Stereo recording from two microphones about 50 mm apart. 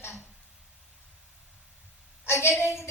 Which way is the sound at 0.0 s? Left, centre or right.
Left.